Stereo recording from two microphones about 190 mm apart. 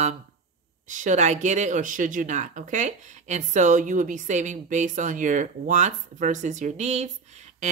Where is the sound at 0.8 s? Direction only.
40° right (ahead or behind).